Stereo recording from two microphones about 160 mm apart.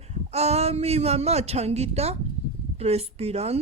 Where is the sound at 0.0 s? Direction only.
40° right (ahead or behind).